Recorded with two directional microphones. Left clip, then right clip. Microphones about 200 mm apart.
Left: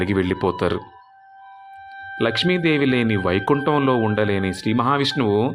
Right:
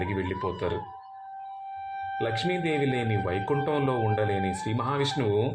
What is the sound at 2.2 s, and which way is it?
Speech, 35° left (ahead or behind).